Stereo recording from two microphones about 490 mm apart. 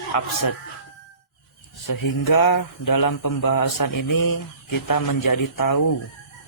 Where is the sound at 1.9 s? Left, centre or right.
Left.